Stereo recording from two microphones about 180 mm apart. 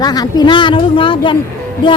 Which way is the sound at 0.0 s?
20° left (ahead or behind).